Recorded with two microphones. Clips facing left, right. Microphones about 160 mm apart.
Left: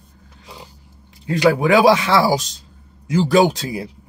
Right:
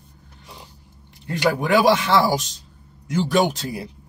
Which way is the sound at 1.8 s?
90° left.